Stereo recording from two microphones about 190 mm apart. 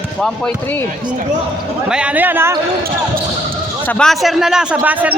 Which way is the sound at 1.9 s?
5° right (ahead or behind).